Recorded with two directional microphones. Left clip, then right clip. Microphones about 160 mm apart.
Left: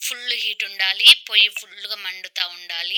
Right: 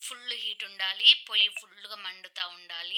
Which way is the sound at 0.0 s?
20° left (ahead or behind).